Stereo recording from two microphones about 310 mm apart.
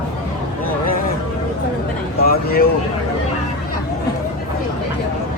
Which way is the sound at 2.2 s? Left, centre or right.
Left.